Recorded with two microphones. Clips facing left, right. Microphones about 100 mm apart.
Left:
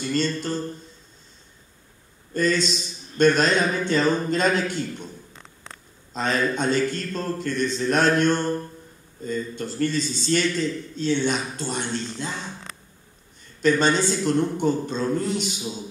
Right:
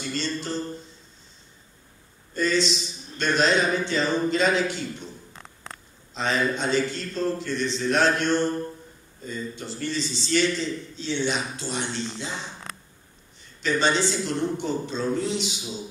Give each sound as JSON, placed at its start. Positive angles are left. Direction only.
{"t": 0.1, "sound": "a man's voice", "side_deg": 50}
{"t": 2.3, "sound": "a man's voice", "side_deg": 50}
{"t": 6.1, "sound": "a man's voice", "side_deg": 45}
{"t": 13.6, "sound": "a man's voice", "side_deg": 50}